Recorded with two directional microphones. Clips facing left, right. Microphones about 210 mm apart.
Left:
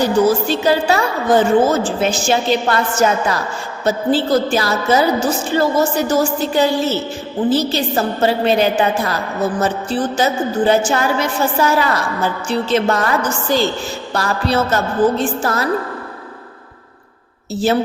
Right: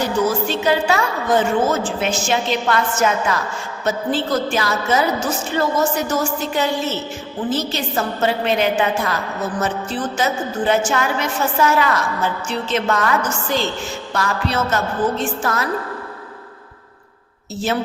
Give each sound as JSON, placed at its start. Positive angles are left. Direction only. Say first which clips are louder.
{"t": 0.0, "sound": "a woman's voice", "louder": "left 5 dB", "side_deg": 35}
{"t": 17.5, "sound": "a woman's voice", "louder": "left 6 dB", "side_deg": 35}